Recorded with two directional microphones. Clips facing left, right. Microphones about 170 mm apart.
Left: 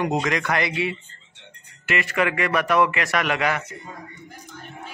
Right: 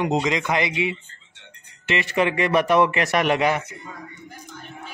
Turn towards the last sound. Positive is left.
turn(degrees=-25)  # may be behind; listen again after turning